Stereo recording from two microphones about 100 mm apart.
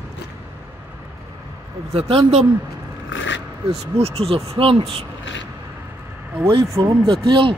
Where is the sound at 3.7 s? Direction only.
90° right; by 5.0 s 70° right (ahead or behind).